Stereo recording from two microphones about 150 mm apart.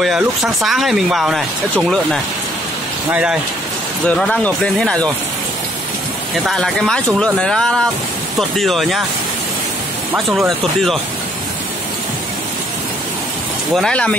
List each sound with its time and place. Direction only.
0.0 s speech: centre (ahead or behind)
3.1 s speech: 10° right (ahead or behind)
4.1 s speech: 5° left (ahead or behind)
6.4 s speech: 5° left (ahead or behind)
13.7 s speech: 5° left (ahead or behind)